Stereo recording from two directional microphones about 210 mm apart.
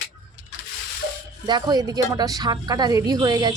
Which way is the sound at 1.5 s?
20° right (ahead or behind).